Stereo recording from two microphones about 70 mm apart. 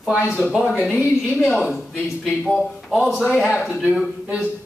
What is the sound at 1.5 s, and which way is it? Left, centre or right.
A man's voice, centre.